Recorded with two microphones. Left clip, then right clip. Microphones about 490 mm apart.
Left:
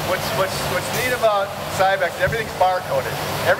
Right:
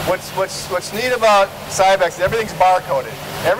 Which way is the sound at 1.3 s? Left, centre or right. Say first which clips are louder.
Right 7 dB; right.